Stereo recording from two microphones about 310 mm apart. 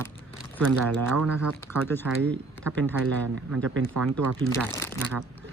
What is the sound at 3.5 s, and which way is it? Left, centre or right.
Speech, right.